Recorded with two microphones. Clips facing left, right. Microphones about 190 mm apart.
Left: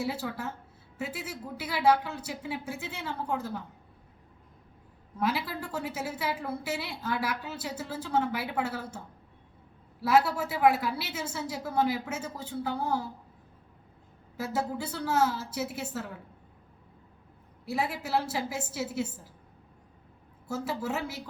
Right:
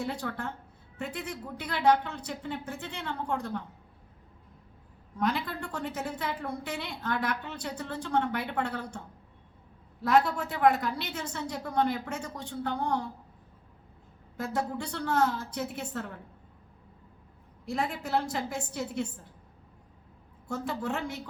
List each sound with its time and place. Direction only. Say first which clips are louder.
0.0 s a woman's voice: left 1 dB; 5° left (ahead or behind)
5.1 s a woman's voice: even; 5° left (ahead or behind)
10.0 s a woman's voice: even; 5° left (ahead or behind)
14.3 s a woman's voice: even; 5° left (ahead or behind)
17.7 s a woman's voice: even; 5° left (ahead or behind)
20.5 s a woman's voice: even; 5° left (ahead or behind)